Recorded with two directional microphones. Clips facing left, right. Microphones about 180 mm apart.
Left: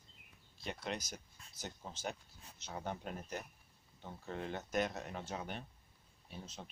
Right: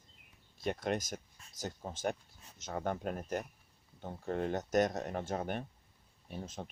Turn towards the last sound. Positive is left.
turn(degrees=-50)  # may be behind; listen again after turning